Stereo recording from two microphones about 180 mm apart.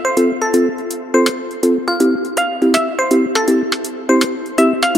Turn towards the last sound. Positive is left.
turn(degrees=0)  # may be behind; listen again after turning